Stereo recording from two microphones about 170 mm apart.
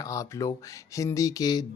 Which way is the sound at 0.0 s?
20° left (ahead or behind).